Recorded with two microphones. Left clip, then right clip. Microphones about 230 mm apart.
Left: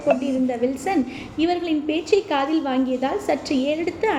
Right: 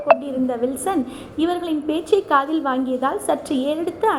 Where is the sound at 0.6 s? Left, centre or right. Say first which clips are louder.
Even; centre.